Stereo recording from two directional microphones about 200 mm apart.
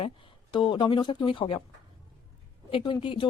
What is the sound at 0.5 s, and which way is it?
A woman's voice, 25° left (ahead or behind).